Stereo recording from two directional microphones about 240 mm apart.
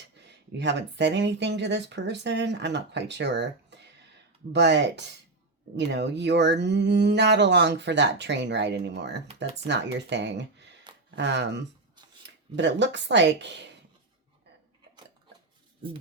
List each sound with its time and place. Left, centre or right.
0.2 s speech: right